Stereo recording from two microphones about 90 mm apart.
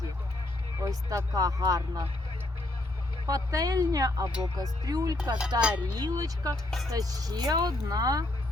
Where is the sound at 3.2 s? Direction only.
40° right (ahead or behind).